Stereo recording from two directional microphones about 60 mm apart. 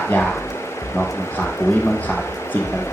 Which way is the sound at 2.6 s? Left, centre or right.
Left.